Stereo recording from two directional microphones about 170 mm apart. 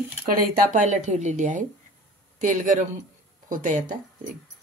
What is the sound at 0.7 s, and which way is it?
Speech, 45° right (ahead or behind).